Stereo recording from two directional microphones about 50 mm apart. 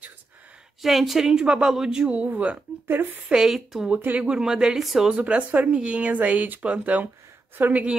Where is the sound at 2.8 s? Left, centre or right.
Right.